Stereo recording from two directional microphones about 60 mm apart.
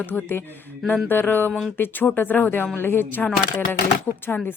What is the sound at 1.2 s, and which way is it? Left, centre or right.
A woman's voice, left.